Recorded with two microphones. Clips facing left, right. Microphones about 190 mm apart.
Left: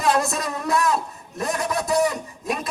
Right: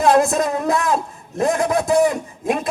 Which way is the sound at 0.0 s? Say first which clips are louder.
Right 7 dB; 55° right (ahead or behind).